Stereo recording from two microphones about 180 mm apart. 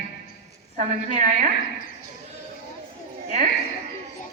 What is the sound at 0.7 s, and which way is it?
Speech, 50° right (ahead or behind).